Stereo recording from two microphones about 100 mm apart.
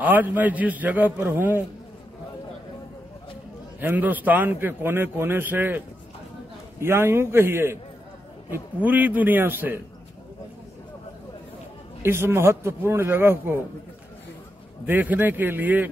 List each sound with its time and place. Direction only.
0.0 s a man's voice: 20° right (ahead or behind)
3.8 s a man's voice: 15° right (ahead or behind)
6.8 s a man's voice: 25° right (ahead or behind)
8.8 s a man's voice: 15° right (ahead or behind)
12.0 s a man's voice: 25° right (ahead or behind)
14.9 s a man's voice: 20° right (ahead or behind)